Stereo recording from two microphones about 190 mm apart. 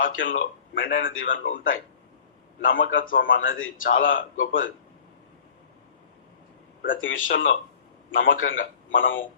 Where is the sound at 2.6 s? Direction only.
90° left.